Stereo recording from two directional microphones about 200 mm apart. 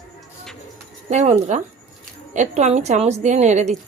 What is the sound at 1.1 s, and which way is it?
Speech, 35° right (ahead or behind).